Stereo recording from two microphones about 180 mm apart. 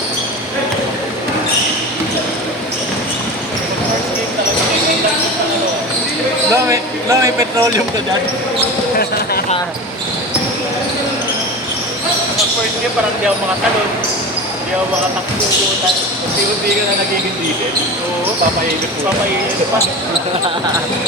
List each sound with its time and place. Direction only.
6.5 s speech: 15° right (ahead or behind)